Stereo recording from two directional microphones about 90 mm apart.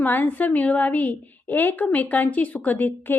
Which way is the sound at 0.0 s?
20° left (ahead or behind).